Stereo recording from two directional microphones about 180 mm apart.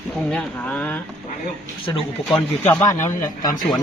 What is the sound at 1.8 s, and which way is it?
Speech, 30° left (ahead or behind).